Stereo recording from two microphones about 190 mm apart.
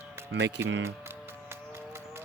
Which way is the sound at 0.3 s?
65° right (ahead or behind).